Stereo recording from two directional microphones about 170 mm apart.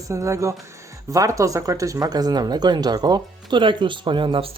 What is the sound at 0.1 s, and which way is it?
Speech, 15° right (ahead or behind).